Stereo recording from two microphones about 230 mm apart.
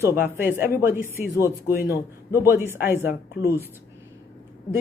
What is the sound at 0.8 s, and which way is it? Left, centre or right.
Speech, centre.